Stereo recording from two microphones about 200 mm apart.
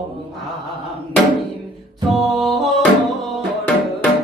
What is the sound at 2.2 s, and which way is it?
Music, centre (ahead or behind).